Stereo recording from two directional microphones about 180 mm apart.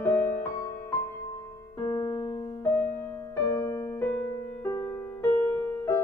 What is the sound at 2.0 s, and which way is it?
Keyboard, 30° left (ahead or behind).